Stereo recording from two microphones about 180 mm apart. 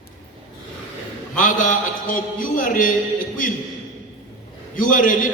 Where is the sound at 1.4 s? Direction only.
45° left (ahead or behind).